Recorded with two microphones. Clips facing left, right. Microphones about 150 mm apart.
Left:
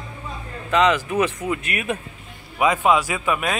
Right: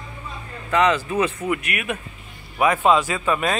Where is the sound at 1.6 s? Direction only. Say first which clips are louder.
Left 2 dB; 30° left (ahead or behind).